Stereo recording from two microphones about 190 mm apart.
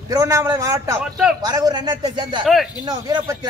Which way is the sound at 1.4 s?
20° right (ahead or behind).